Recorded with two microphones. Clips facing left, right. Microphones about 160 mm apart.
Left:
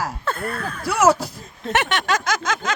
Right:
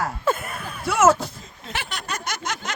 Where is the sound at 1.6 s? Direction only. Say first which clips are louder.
Left 11 dB; 70° left (ahead or behind); by 2.5 s 90° left.